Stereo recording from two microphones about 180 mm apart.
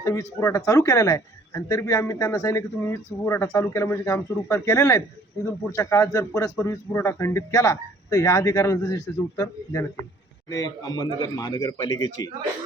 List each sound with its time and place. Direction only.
0.0 s speech: 15° left (ahead or behind)